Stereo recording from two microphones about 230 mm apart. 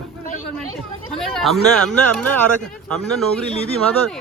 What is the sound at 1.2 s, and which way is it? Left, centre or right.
Speech, centre.